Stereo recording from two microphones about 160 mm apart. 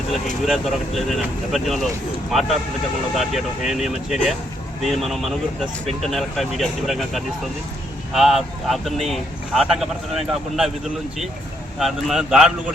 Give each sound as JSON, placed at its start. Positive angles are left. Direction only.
{"t": 0.4, "sound": "speech", "side_deg": 0}
{"t": 11.8, "sound": "speech", "side_deg": 0}